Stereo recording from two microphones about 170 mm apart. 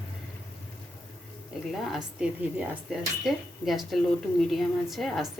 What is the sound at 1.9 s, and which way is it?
A woman's voice, 5° right (ahead or behind).